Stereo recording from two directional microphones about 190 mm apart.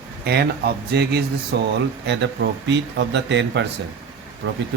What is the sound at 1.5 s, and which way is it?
Speech, 65° right (ahead or behind).